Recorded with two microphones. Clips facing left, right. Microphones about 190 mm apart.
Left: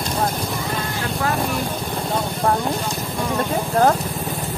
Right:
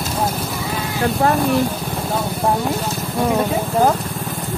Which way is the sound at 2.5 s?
Centre (ahead or behind).